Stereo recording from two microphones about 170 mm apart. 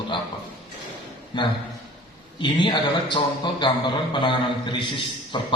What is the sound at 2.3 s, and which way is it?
A man's voice, 30° left (ahead or behind).